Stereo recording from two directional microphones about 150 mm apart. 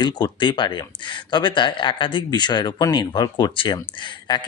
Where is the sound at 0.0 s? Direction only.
30° left (ahead or behind).